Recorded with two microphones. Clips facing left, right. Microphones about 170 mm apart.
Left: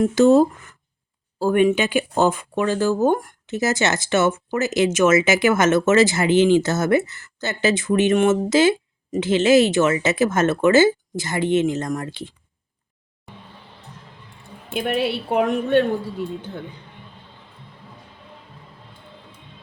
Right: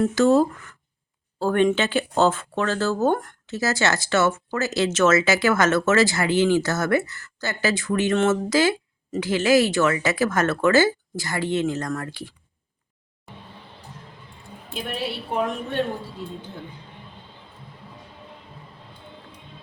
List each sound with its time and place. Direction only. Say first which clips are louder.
0.0 s speech: left 4 dB; 20° left (ahead or behind)
1.4 s speech: left 3 dB; 10° left (ahead or behind)
14.7 s a woman's voice: left 8 dB; 65° left (ahead or behind)